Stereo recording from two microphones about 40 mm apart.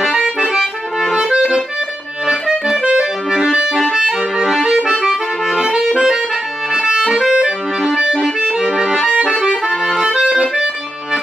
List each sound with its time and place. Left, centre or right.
0.4 s accordion: centre
3.9 s music: centre
4.8 s accordion: centre
5.8 s music: centre
6.9 s accordion: centre
9.7 s accordion: centre
10.0 s accordion: centre